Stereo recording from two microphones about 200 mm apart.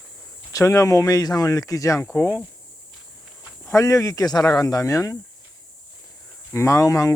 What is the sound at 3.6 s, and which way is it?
Speech, 15° left (ahead or behind).